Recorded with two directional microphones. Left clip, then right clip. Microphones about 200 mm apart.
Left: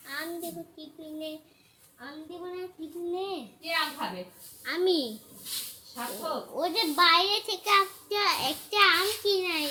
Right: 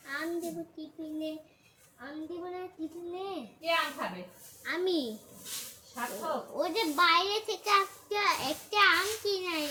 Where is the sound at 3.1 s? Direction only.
15° left (ahead or behind).